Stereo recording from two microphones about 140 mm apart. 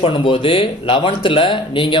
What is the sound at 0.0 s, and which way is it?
Speech, 35° left (ahead or behind).